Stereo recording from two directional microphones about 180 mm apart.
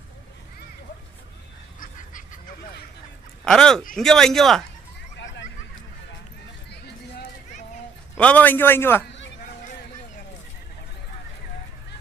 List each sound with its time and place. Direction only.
3.4 s speech: 5° left (ahead or behind)
6.7 s a sound: 65° left (ahead or behind)
8.1 s a man's voice: 10° left (ahead or behind)